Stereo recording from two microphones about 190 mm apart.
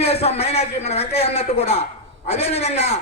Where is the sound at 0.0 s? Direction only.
35° left (ahead or behind).